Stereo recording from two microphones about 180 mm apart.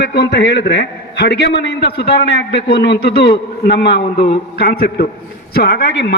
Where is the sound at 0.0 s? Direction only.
65° left (ahead or behind).